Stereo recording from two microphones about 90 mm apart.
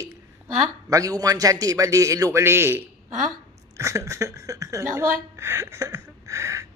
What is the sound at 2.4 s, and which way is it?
A man's voice, 25° right (ahead or behind).